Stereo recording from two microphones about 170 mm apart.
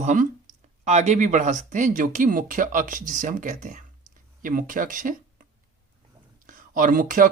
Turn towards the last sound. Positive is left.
turn(degrees=-50)  # may be behind; listen again after turning